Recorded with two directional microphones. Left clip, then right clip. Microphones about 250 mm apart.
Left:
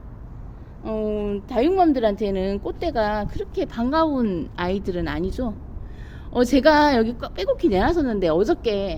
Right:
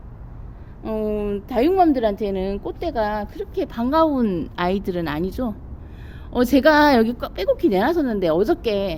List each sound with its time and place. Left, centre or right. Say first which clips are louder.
0.8 s a woman's voice: right 1 dB; centre